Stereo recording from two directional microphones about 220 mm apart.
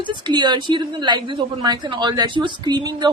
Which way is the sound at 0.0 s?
20° right (ahead or behind).